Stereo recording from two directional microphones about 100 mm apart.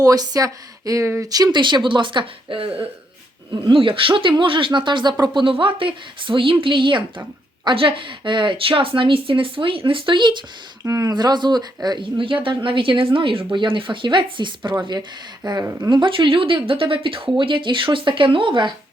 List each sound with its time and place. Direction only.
0.0 s speech: 40° right (ahead or behind)
1.5 s a woman's voice: 50° right (ahead or behind)
10.8 s speech: 30° right (ahead or behind)
11.1 s a woman's voice: 45° right (ahead or behind)